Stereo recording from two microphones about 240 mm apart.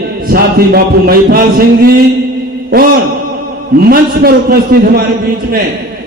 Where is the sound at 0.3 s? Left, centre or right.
Right.